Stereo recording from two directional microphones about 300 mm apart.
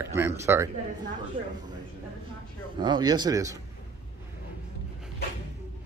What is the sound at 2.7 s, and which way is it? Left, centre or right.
Speech, centre.